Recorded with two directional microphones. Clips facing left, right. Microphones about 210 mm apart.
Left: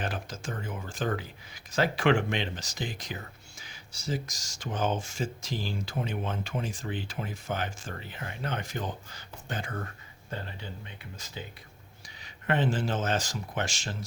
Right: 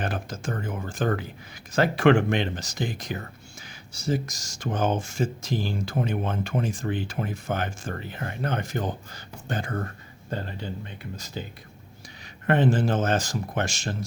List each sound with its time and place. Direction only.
0.0 s speech: 50° right (ahead or behind)
12.2 s speech: 50° right (ahead or behind)